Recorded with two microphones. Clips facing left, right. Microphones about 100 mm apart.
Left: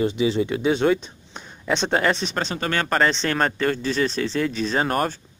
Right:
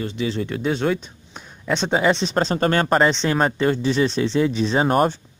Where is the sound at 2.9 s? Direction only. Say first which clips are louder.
Right 3 dB; 15° right (ahead or behind).